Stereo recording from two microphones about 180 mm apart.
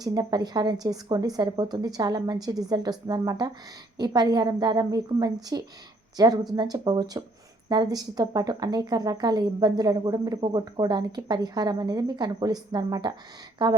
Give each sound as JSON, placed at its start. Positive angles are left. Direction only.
{"t": 0.0, "sound": "speech", "side_deg": -20}